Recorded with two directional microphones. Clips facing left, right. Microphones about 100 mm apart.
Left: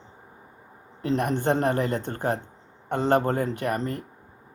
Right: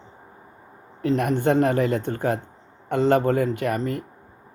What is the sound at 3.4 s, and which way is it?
Speech, 35° left (ahead or behind).